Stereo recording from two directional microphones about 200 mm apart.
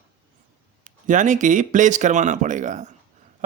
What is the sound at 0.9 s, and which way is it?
Speech, 40° right (ahead or behind).